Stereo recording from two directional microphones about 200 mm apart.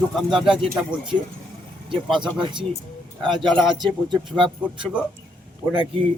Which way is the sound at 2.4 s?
25° right (ahead or behind).